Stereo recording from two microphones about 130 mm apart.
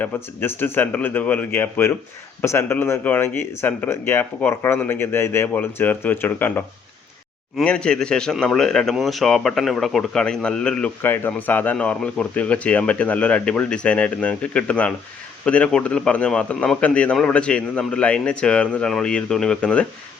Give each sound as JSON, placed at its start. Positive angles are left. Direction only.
{"t": 0.0, "sound": "speech", "side_deg": 15}